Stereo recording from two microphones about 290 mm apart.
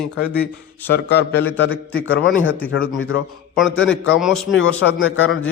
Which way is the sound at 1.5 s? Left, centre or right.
Left.